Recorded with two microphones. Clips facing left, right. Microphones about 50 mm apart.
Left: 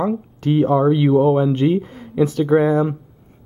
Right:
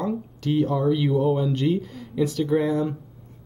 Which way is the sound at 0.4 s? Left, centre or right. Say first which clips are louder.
Left 7 dB; left.